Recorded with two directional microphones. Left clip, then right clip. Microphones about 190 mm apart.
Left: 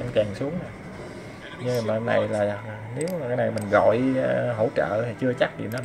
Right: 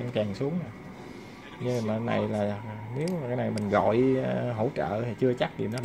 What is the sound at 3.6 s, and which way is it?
A man's voice, 30° right (ahead or behind).